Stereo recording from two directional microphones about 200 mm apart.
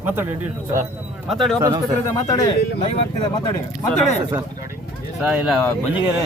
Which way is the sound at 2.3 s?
25° left (ahead or behind).